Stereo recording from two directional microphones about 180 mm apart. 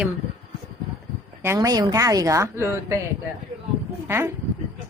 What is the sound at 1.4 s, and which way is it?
A woman's voice, 15° right (ahead or behind).